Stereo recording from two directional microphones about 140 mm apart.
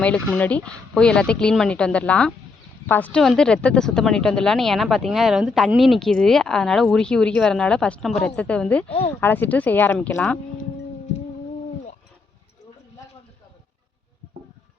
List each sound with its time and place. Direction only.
0.3 s speech: 10° left (ahead or behind)
8.9 s speech: 40° left (ahead or behind)
9.2 s speech: 15° left (ahead or behind)